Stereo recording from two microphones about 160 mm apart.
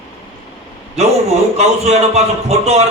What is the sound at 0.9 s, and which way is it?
Speech, 40° right (ahead or behind).